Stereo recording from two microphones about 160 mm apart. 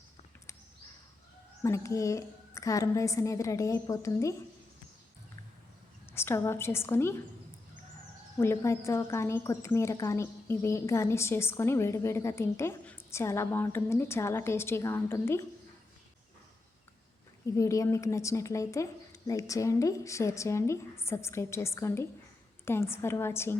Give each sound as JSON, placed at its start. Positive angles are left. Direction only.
{"t": 1.6, "sound": "a woman's voice", "side_deg": 20}
{"t": 6.1, "sound": "a woman's voice", "side_deg": 15}
{"t": 8.4, "sound": "a woman's voice", "side_deg": 15}
{"t": 17.4, "sound": "a woman's voice", "side_deg": 20}